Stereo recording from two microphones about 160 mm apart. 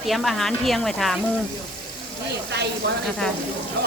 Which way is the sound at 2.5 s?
90° right.